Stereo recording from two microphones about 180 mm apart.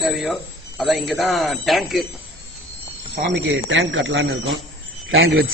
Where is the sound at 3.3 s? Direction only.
90° right.